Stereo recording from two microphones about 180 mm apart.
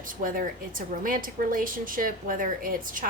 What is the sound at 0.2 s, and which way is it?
A woman's voice, 50° right (ahead or behind).